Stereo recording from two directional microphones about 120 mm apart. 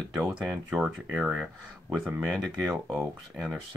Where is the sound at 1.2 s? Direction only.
10° right (ahead or behind).